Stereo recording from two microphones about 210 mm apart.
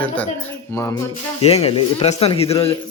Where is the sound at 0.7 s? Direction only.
15° left (ahead or behind).